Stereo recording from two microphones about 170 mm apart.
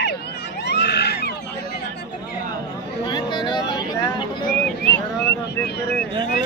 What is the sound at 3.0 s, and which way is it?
Vehicle, 25° left (ahead or behind).